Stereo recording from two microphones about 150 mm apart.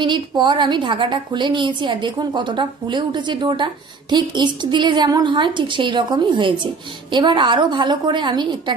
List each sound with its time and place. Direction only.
0.0 s a woman's voice: 30° right (ahead or behind)